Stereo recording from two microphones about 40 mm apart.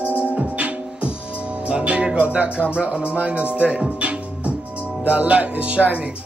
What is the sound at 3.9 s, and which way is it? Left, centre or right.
Music, right.